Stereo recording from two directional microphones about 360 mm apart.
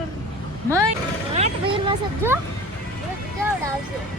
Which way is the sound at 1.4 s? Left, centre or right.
Centre.